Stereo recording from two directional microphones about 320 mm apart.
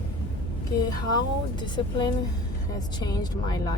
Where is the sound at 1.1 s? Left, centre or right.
Centre.